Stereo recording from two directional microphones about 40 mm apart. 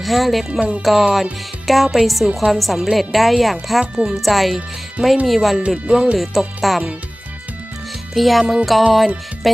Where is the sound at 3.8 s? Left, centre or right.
Right.